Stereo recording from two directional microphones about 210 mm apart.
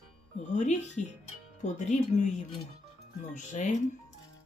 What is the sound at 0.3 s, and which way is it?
Speech, 35° left (ahead or behind).